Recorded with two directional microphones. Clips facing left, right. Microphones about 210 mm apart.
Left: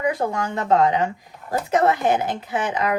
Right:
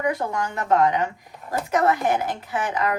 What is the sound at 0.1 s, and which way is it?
A woman's voice, 25° left (ahead or behind).